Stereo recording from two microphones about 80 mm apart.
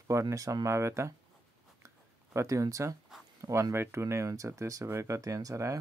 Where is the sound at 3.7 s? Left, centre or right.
Right.